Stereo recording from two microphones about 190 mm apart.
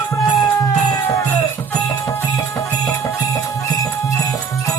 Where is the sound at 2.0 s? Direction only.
15° left (ahead or behind).